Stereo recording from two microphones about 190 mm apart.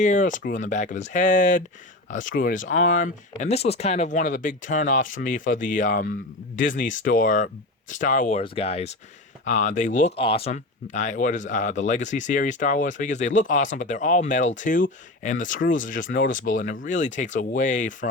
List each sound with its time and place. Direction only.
0.0 s speech: 40° left (ahead or behind)